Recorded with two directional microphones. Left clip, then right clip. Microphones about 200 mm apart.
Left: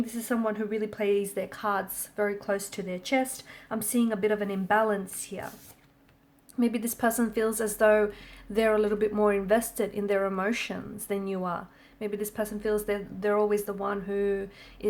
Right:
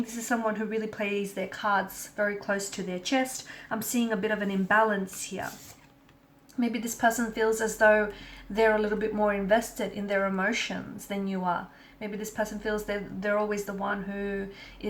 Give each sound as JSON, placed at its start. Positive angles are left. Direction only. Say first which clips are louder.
{"t": 0.3, "sound": "speech", "louder": "right 1 dB", "side_deg": 45}
{"t": 6.6, "sound": "speech", "louder": "right 1 dB", "side_deg": 50}